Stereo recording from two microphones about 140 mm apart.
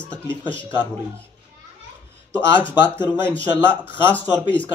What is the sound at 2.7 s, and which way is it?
Speech, 15° right (ahead or behind).